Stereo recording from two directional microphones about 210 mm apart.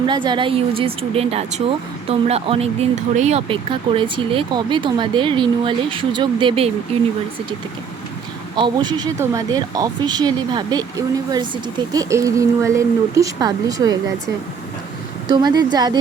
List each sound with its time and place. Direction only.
0.1 s speech: 20° right (ahead or behind)
8.5 s speech: 20° right (ahead or behind)
15.3 s speech: 20° right (ahead or behind)